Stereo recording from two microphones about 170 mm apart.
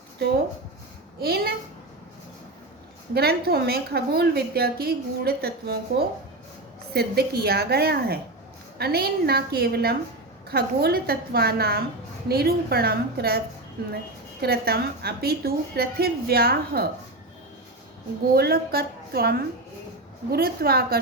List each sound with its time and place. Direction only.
1.2 s a woman's voice: 65° right (ahead or behind)
3.2 s a woman's voice: 65° right (ahead or behind)
14.4 s a woman's voice: 70° right (ahead or behind)
18.3 s a woman's voice: 65° right (ahead or behind)